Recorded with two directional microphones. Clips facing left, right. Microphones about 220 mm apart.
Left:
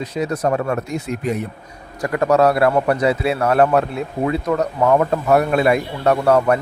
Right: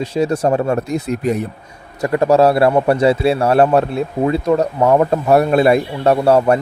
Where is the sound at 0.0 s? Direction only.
30° right (ahead or behind).